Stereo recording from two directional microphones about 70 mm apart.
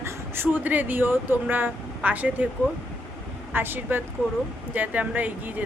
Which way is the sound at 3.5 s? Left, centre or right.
Right.